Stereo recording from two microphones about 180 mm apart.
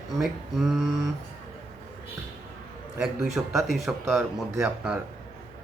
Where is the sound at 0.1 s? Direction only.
Centre (ahead or behind).